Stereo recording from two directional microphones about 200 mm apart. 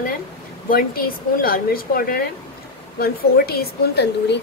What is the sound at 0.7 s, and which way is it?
A woman's voice, 45° left (ahead or behind).